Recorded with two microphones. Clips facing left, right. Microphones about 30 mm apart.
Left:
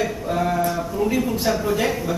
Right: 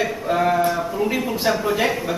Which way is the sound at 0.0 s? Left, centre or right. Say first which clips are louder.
Right 3 dB; centre.